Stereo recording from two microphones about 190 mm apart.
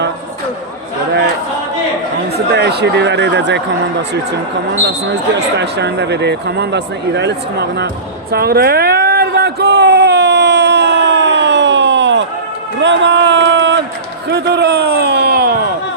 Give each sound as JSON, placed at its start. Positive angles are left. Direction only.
{"t": 2.5, "sound": "speech", "side_deg": -60}
{"t": 4.9, "sound": "speech", "side_deg": -65}
{"t": 8.3, "sound": "a sound", "side_deg": -55}